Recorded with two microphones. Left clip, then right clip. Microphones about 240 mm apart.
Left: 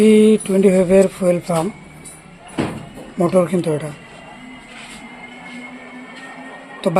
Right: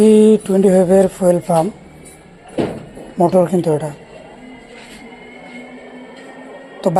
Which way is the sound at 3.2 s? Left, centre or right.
Centre.